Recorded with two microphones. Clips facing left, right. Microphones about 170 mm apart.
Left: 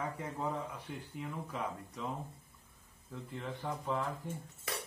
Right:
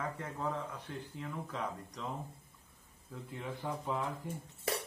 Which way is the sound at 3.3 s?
5° right (ahead or behind).